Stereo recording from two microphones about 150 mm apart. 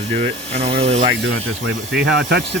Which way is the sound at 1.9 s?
90° right.